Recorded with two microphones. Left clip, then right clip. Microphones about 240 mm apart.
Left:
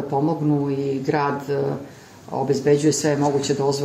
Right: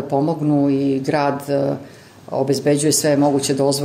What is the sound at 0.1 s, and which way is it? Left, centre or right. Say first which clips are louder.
Speech: right 4 dB; right.